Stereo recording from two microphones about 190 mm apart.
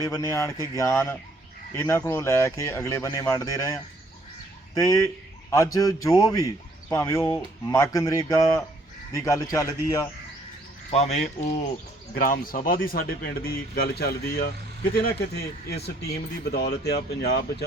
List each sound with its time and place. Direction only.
0.0 s speech: 15° left (ahead or behind)
10.9 s speech: 35° left (ahead or behind); by 17.4 s 60° left (ahead or behind)